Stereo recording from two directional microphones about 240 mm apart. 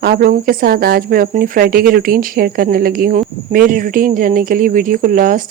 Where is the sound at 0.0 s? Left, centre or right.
Right.